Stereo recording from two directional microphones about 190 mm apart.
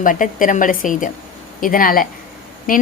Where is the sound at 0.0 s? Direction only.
45° left (ahead or behind).